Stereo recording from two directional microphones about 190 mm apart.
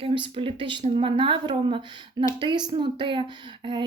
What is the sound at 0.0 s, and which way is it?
Speech, 25° right (ahead or behind).